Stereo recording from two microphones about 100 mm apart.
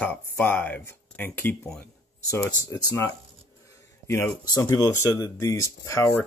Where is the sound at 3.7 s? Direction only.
30° left (ahead or behind).